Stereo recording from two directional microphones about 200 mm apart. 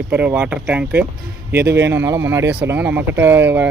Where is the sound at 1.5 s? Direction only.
55° right (ahead or behind).